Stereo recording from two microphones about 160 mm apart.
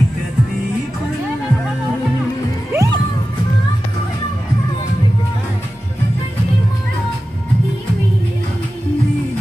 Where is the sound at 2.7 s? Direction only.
20° right (ahead or behind).